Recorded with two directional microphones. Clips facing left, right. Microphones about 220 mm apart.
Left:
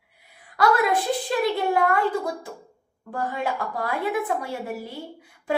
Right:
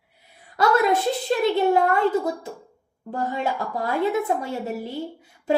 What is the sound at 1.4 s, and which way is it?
A woman's voice, 25° right (ahead or behind).